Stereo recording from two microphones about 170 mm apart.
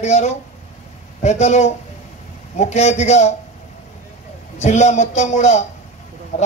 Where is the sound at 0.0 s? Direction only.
40° left (ahead or behind).